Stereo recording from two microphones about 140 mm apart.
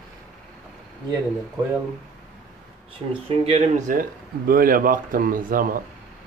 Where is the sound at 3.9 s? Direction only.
85° right.